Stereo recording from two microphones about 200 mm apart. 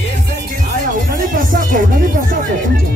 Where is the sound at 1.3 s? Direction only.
45° right (ahead or behind).